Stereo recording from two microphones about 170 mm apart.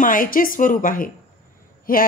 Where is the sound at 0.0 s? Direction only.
55° left (ahead or behind).